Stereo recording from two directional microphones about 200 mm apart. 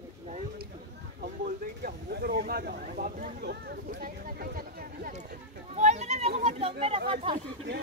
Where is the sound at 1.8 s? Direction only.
50° right (ahead or behind).